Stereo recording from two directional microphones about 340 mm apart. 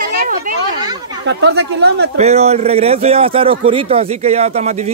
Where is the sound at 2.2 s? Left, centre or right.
Centre.